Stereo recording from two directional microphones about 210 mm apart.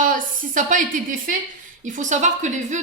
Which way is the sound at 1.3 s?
40° right (ahead or behind).